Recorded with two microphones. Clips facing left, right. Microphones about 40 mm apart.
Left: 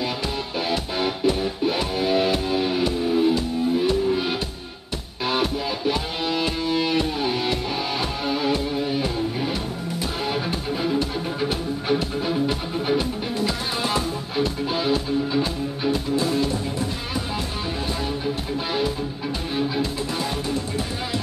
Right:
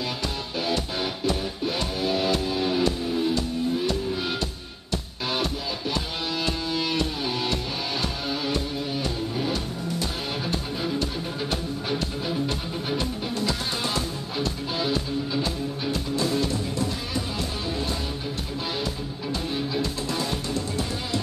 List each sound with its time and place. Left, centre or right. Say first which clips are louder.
0.6 s music: left 2 dB; centre
19.5 s music: left 5 dB; centre